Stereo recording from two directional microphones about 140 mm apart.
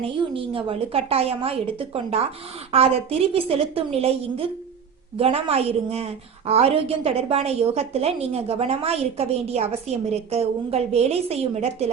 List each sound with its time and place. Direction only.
0.0 s a woman's voice: 40° right (ahead or behind)